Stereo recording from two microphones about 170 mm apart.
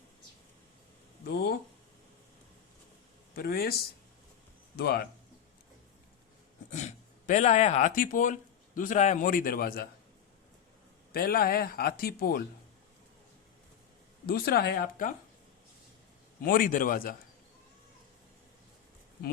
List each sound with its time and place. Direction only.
1.2 s a sound: 75° left (ahead or behind)
3.3 s speech: 65° left (ahead or behind)
4.8 s speech: 65° left (ahead or behind)
6.7 s speech: 45° left (ahead or behind); by 9.8 s 60° left (ahead or behind)
11.1 s speech: 60° left (ahead or behind)
14.3 s speech: 65° left (ahead or behind)
16.5 s speech: 55° left (ahead or behind)